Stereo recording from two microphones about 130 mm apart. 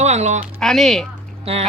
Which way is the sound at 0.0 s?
60° right (ahead or behind).